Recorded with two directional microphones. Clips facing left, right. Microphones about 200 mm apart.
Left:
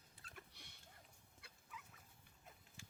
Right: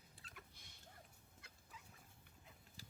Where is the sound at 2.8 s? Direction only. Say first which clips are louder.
Right 2 dB; 35° right (ahead or behind).